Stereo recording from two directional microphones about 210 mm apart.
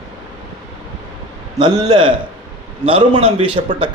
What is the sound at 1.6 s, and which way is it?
A man's voice, 20° right (ahead or behind).